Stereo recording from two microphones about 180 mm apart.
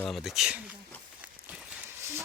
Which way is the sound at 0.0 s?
Centre (ahead or behind).